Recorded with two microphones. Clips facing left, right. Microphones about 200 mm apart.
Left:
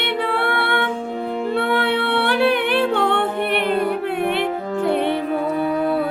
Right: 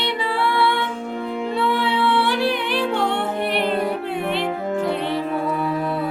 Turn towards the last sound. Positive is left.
turn(degrees=60)  # may be behind; listen again after turning